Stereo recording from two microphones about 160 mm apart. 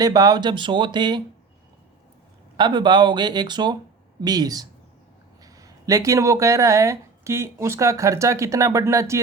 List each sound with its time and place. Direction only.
0.0 s speech: 25° right (ahead or behind)
2.6 s speech: 30° right (ahead or behind)